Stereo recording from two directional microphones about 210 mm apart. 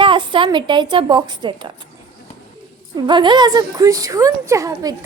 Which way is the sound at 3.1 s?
20° right (ahead or behind).